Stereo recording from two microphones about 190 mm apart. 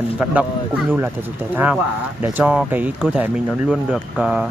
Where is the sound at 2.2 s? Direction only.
10° right (ahead or behind).